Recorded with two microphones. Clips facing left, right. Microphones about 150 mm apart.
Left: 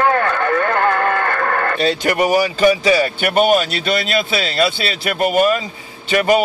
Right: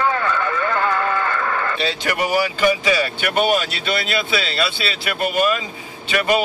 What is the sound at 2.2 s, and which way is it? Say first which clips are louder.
A man's voice: left 4 dB; 40° left (ahead or behind).